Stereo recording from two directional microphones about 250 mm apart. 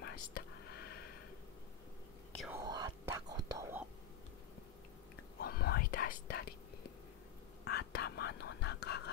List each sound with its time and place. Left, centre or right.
0.0 s whispering: left
2.6 s whispering: centre
5.4 s whispering: left
7.6 s whispering: left